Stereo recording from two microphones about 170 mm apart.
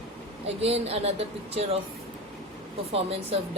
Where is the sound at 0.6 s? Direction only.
35° right (ahead or behind).